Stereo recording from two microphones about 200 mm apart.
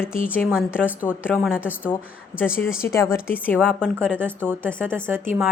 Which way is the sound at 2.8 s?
15° left (ahead or behind).